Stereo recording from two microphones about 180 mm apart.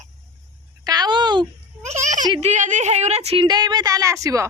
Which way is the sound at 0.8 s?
20° right (ahead or behind).